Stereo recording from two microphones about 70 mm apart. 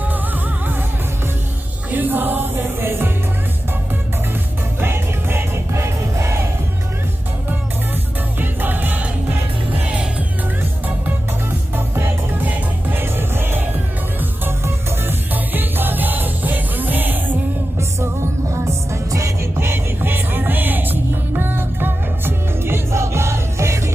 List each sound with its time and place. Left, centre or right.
1.9 s music: right
4.8 s music: right
8.4 s music: right
11.9 s music: right
18.5 s music: right
19.5 s music: right